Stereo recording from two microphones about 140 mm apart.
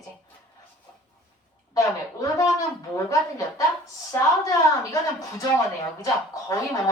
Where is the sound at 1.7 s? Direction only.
25° left (ahead or behind).